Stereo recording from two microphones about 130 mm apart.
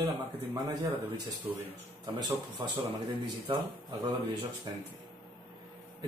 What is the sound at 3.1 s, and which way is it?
Speech, 40° right (ahead or behind).